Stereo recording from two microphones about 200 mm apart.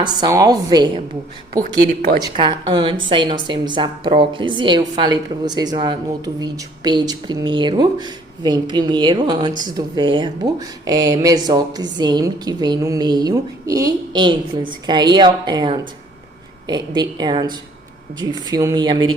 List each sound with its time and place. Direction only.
0.0 s a woman's voice: 20° right (ahead or behind)
1.9 s speech: 40° right (ahead or behind)
2.3 s a woman's voice: 25° right (ahead or behind)